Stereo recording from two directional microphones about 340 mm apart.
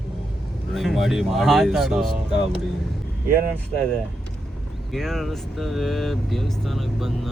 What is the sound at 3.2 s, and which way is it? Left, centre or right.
Speech, right.